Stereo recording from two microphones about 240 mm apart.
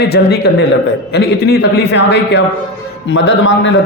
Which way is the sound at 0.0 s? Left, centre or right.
Left.